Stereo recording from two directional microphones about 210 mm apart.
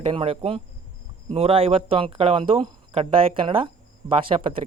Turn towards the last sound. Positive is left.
turn(degrees=-25)  # may be behind; listen again after turning